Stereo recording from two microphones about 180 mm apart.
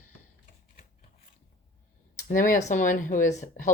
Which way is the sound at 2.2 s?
45° left (ahead or behind).